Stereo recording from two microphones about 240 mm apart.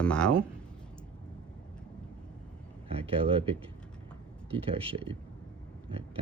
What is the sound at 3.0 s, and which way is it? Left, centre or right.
Speech, right.